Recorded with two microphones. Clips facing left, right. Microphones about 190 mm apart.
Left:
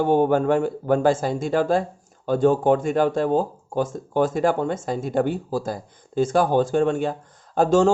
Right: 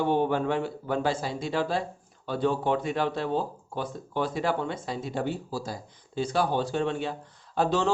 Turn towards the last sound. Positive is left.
turn(degrees=45)  # may be behind; listen again after turning